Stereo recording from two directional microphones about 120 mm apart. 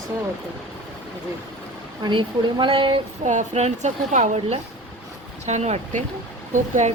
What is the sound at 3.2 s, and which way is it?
Speech, 75° right (ahead or behind).